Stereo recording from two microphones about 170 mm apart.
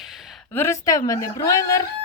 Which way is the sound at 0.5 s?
15° left (ahead or behind).